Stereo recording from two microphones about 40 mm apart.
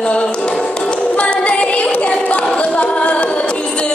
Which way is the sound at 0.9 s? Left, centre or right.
Left.